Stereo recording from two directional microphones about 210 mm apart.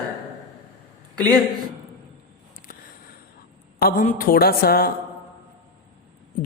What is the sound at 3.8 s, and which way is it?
A man's voice, 40° left (ahead or behind).